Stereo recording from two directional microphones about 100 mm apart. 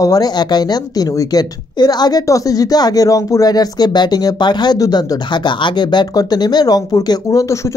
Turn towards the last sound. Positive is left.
turn(degrees=35)  # may be behind; listen again after turning